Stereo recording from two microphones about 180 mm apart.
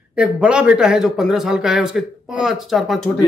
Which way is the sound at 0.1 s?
5° right (ahead or behind).